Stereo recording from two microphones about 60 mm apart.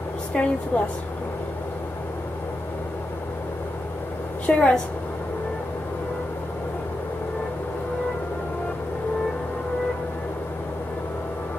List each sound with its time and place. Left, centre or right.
0.3 s a woman's voice: centre
4.5 s a woman's voice: centre